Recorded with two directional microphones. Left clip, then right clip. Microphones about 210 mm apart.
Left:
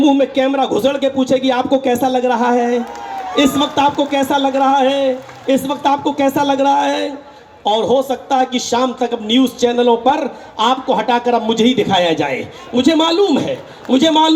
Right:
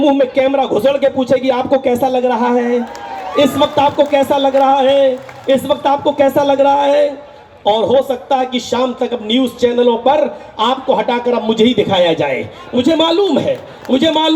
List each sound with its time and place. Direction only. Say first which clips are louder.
0.0 s a man's voice: right 2 dB; 40° left (ahead or behind)